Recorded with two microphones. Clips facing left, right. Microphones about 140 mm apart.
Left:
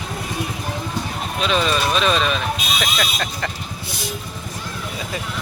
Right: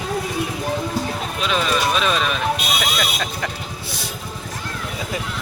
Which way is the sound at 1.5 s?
5° right (ahead or behind).